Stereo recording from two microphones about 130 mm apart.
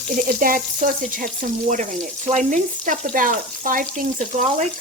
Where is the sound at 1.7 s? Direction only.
75° right (ahead or behind).